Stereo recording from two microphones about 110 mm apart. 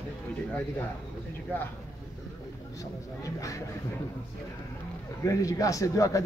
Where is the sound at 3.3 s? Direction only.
30° left (ahead or behind).